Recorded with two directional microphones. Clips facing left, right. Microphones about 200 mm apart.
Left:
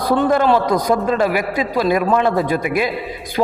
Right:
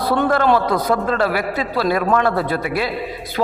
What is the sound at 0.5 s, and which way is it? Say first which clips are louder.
A man's voice: left 1 dB; 15° left (ahead or behind).